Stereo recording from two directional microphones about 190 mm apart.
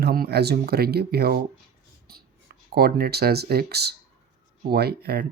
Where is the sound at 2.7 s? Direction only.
55° right (ahead or behind).